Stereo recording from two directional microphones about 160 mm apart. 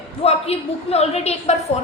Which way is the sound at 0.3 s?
40° left (ahead or behind).